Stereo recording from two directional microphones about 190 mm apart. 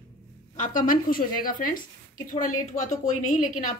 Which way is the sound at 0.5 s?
45° left (ahead or behind).